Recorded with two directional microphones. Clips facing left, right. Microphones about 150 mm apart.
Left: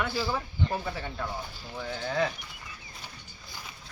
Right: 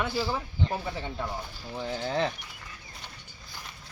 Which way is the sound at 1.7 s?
25° right (ahead or behind).